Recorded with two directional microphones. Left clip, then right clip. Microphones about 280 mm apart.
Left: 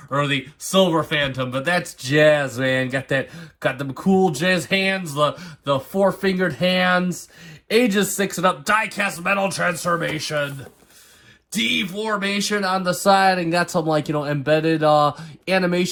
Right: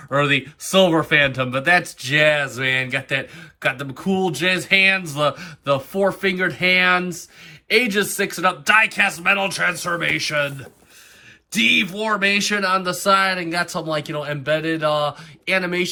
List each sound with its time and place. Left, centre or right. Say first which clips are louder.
0.1 s speech: right 3 dB; centre
11.5 s speech: right 5 dB; centre